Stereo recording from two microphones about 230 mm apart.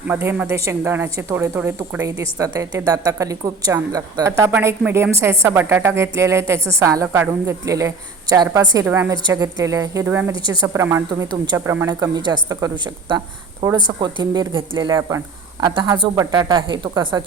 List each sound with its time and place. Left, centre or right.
0.1 s speech: centre